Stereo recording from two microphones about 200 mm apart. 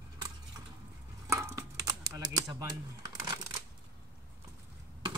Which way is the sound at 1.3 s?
15° right (ahead or behind).